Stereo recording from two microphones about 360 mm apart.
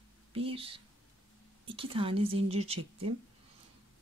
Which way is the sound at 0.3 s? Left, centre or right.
Centre.